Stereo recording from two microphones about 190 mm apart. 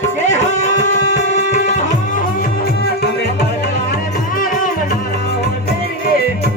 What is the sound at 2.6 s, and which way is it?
Music, 55° left (ahead or behind).